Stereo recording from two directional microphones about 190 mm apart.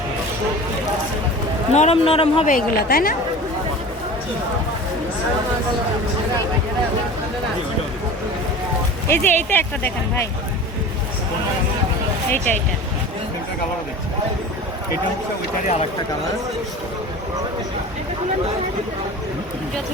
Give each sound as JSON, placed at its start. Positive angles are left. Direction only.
{"t": 1.7, "sound": "speech", "side_deg": 35}
{"t": 2.5, "sound": "a woman's voice", "side_deg": 50}
{"t": 9.0, "sound": "speech", "side_deg": 10}
{"t": 12.5, "sound": "speech", "side_deg": 10}